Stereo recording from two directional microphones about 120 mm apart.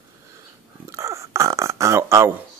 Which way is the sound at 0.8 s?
25° right (ahead or behind).